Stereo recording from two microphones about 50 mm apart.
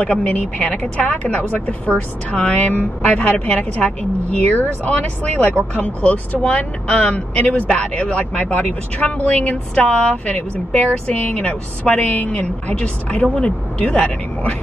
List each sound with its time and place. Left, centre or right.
0.0 s speech: left
13.7 s speech: left